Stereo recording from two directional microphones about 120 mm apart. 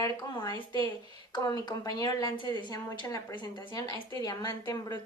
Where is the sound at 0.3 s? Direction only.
40° left (ahead or behind).